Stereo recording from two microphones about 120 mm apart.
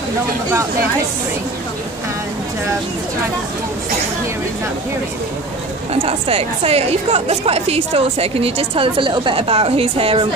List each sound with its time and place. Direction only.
6.0 s a woman's voice: 55° right (ahead or behind)